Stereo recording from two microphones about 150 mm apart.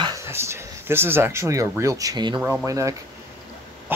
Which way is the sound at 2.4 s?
20° right (ahead or behind).